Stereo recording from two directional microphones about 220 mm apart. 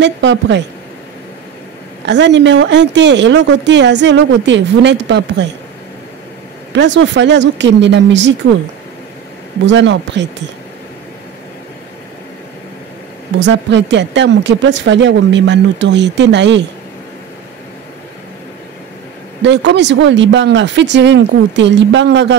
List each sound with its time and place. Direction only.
0.0 s speech: 55° right (ahead or behind)
2.0 s speech: 50° right (ahead or behind)
6.7 s speech: 55° right (ahead or behind)
9.7 s speech: 55° right (ahead or behind)
13.4 s speech: 55° right (ahead or behind)
19.4 s speech: 55° right (ahead or behind)